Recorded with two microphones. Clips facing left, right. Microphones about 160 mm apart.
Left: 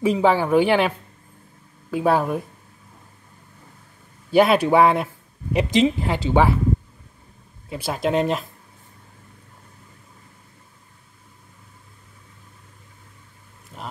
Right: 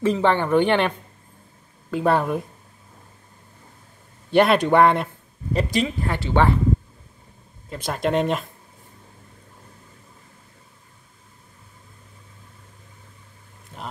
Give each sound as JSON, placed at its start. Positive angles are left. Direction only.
{"t": 0.0, "sound": "speech", "side_deg": 10}
{"t": 4.3, "sound": "speech", "side_deg": 5}
{"t": 5.5, "sound": "speech", "side_deg": 20}
{"t": 7.7, "sound": "speech", "side_deg": 5}
{"t": 13.7, "sound": "a sound", "side_deg": 5}